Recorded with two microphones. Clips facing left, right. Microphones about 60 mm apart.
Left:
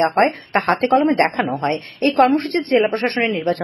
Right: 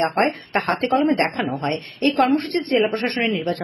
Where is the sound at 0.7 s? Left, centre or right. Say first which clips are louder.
Left 5 dB; left.